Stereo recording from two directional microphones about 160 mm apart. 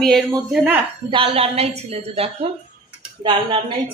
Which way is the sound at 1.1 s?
35° right (ahead or behind).